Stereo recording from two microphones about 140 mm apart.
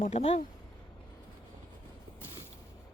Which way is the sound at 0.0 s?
50° left (ahead or behind).